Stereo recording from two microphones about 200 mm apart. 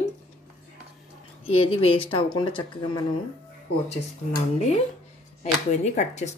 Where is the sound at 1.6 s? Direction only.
30° left (ahead or behind).